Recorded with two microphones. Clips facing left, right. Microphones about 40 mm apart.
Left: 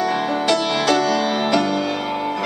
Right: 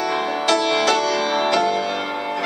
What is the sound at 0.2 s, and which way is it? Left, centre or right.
Music, centre.